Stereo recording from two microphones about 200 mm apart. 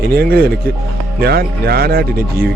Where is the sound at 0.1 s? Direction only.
50° right (ahead or behind).